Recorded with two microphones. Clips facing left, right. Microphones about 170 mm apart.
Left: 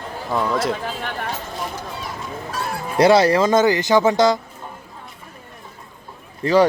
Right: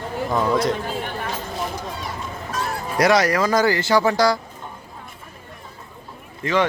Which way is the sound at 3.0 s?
30° left (ahead or behind).